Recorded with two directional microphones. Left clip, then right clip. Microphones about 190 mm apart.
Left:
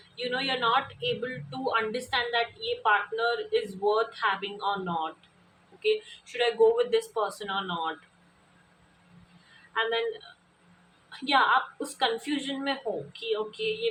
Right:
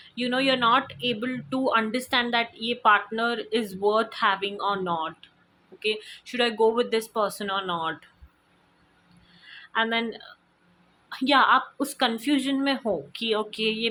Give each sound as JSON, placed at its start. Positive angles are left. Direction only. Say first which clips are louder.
{"t": 0.2, "sound": "speech", "louder": "right 5 dB", "side_deg": -50}
{"t": 9.7, "sound": "speech", "louder": "right 3 dB", "side_deg": -50}
{"t": 11.1, "sound": "speech", "louder": "right 4 dB", "side_deg": -50}